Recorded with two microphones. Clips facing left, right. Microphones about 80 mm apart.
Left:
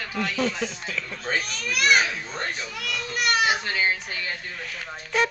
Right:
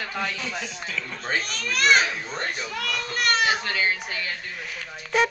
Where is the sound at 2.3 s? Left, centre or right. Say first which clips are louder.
Right 1 dB; centre.